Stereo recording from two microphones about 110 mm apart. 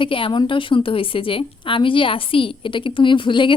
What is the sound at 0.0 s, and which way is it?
A woman's voice, 50° left (ahead or behind).